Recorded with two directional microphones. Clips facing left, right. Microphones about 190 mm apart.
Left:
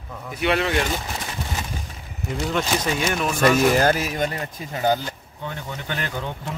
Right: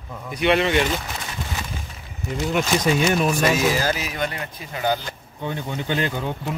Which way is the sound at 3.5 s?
55° left (ahead or behind).